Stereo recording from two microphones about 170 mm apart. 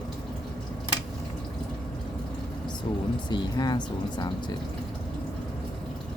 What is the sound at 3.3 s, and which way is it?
Speech, 25° left (ahead or behind).